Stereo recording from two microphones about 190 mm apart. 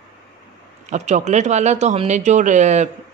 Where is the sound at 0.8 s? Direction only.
40° right (ahead or behind).